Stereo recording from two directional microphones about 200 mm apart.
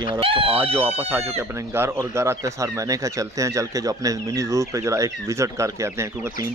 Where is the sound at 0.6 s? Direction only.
10° right (ahead or behind).